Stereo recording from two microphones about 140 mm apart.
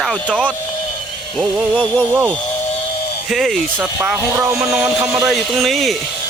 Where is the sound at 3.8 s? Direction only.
15° right (ahead or behind).